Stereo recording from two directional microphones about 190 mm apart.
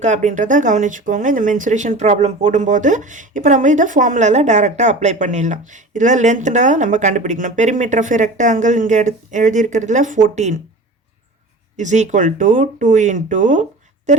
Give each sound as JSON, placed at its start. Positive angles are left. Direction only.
{"t": 0.0, "sound": "speech", "side_deg": -40}
{"t": 11.8, "sound": "speech", "side_deg": -40}